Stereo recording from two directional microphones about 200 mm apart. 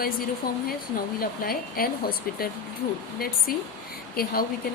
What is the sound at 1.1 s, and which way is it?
Speech, 45° left (ahead or behind).